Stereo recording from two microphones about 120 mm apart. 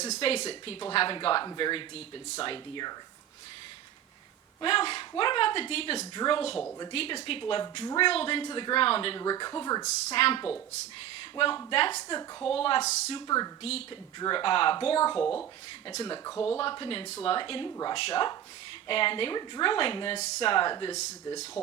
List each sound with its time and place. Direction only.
0.0 s speech: 60° left (ahead or behind); by 2.9 s 45° left (ahead or behind)
4.6 s speech: 50° left (ahead or behind)
9.2 s speech: 35° left (ahead or behind)
9.8 s speech: 55° left (ahead or behind)
11.7 s speech: 50° left (ahead or behind)
12.8 s speech: 70° left (ahead or behind)
13.1 s speech: 30° left (ahead or behind)
13.6 s speech: 60° left (ahead or behind)
14.2 s speech: 40° left (ahead or behind)
15.1 s speech: 10° left (ahead or behind)
16.1 s speech: 30° left (ahead or behind)
16.6 s speech: 45° left (ahead or behind)
20.1 s speech: 65° left (ahead or behind)
20.5 s speech: 40° left (ahead or behind)